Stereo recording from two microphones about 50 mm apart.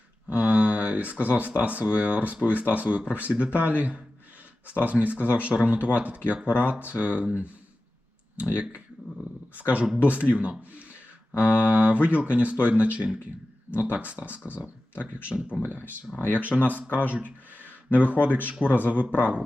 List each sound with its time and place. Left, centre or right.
0.3 s a sound: right
1.2 s speech: right
8.4 s speech: right
16.1 s speech: left
16.4 s speech: right
16.9 s speech: left
18.3 s speech: right
18.6 s speech: left
18.9 s speech: right